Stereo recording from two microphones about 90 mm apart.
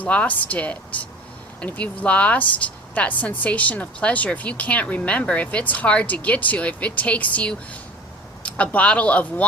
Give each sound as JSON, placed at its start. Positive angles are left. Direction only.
{"t": 0.0, "sound": "speech", "side_deg": 15}